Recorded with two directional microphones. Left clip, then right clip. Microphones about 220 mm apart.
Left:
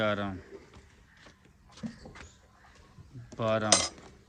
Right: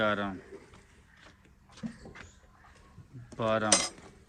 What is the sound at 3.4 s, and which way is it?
Speech, 5° left (ahead or behind).